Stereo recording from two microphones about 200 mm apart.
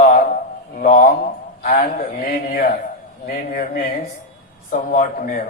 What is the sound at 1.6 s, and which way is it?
A man's voice, 45° left (ahead or behind).